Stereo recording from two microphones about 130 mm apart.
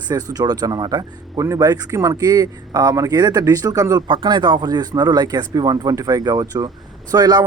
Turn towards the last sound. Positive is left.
turn(degrees=-30)  # may be behind; listen again after turning